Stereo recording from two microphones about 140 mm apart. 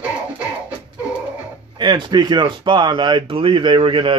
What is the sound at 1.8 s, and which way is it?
Speech, 30° right (ahead or behind).